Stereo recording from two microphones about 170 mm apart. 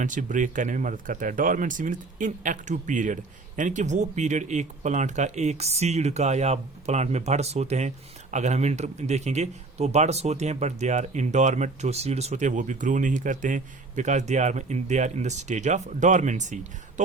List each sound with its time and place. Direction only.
0.0 s speech: 50° right (ahead or behind)